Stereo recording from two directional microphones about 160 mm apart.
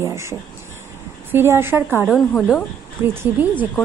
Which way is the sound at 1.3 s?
15° right (ahead or behind).